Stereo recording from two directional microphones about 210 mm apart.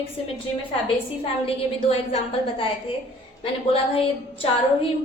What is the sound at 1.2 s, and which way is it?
A woman's voice, 30° left (ahead or behind).